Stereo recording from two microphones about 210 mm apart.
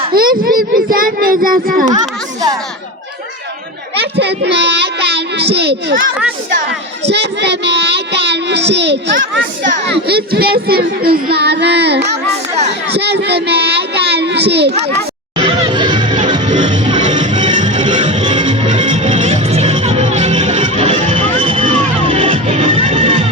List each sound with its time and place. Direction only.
0.4 s a child's voice: 45° right (ahead or behind)
1.9 s speech: 15° right (ahead or behind)
4.0 s a child's voice: 55° right (ahead or behind)
7.1 s a child's voice: 55° right (ahead or behind)
13.0 s child singing: 50° right (ahead or behind)
15.4 s music: 25° right (ahead or behind)